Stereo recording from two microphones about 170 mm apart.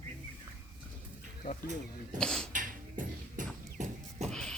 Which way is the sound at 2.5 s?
50° right (ahead or behind).